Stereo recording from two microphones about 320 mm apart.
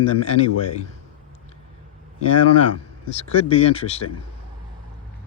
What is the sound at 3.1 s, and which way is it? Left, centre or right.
Speech, centre.